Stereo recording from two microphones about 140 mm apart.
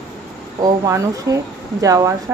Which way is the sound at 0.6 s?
25° right (ahead or behind).